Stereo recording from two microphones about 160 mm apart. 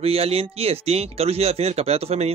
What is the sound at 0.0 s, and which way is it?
Speech, 40° right (ahead or behind).